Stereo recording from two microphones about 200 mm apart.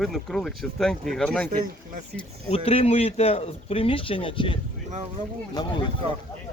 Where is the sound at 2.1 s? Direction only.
30° left (ahead or behind).